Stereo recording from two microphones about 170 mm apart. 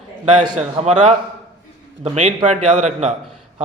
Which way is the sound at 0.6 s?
40° right (ahead or behind).